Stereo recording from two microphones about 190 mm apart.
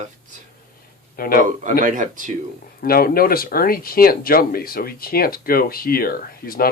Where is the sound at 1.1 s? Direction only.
50° left (ahead or behind).